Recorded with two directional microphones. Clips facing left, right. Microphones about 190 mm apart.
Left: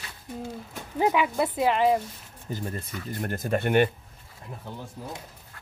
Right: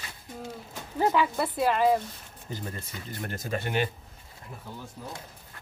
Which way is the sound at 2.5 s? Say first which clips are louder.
Left 4 dB; 50° left (ahead or behind).